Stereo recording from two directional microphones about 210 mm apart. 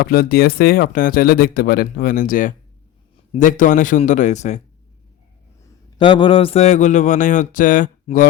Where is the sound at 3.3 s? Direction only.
40° left (ahead or behind).